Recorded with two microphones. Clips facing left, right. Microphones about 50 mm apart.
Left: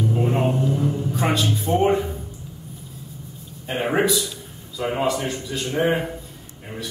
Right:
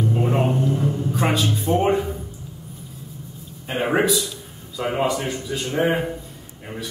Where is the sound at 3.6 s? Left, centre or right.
Centre.